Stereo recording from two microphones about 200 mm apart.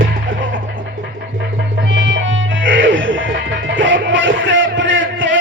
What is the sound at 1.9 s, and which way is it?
Music, 70° right (ahead or behind).